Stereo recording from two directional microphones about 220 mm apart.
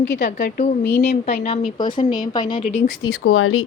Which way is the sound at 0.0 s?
55° left (ahead or behind).